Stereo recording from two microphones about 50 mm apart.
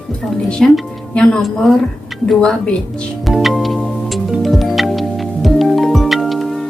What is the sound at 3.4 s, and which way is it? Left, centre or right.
Music, centre.